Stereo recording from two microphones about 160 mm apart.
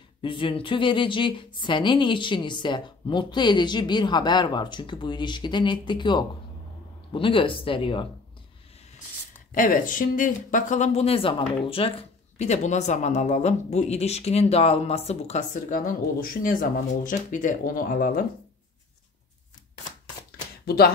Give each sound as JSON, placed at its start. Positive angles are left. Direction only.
{"t": 0.2, "sound": "a woman's voice", "side_deg": 30}
{"t": 9.5, "sound": "speech", "side_deg": 60}
{"t": 20.6, "sound": "speech", "side_deg": 80}